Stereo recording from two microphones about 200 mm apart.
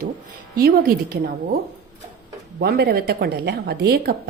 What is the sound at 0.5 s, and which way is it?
Speech, 50° right (ahead or behind).